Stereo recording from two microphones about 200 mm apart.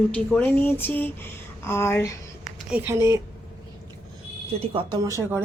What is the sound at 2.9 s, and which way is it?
Speech, 15° right (ahead or behind).